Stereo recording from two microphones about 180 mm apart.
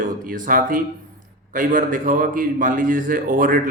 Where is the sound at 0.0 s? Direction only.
50° right (ahead or behind).